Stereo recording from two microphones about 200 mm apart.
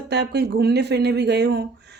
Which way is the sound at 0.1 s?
55° right (ahead or behind).